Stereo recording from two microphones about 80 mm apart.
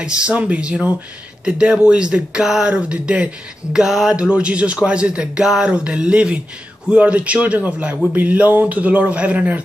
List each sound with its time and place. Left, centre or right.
0.0 s a man's voice: centre